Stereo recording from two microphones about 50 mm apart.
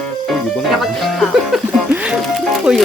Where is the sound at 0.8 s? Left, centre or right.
Centre.